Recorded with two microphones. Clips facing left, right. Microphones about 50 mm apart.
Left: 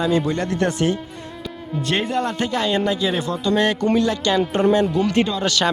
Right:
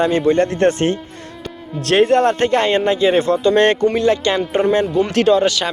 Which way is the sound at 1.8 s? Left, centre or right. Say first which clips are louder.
Right 9 dB; right.